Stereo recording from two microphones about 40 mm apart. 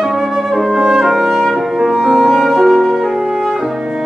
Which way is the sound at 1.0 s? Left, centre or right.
Centre.